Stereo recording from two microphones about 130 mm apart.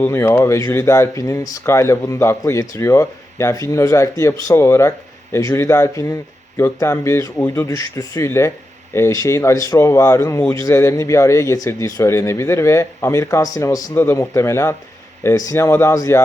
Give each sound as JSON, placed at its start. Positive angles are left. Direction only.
{"t": 0.0, "sound": "speech", "side_deg": 15}